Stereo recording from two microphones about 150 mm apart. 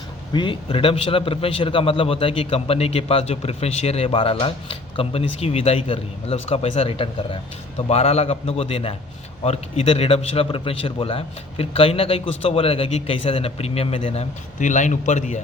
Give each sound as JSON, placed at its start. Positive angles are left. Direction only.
{"t": 0.3, "sound": "a man's voice", "side_deg": 35}
{"t": 14.6, "sound": "a man's voice", "side_deg": 55}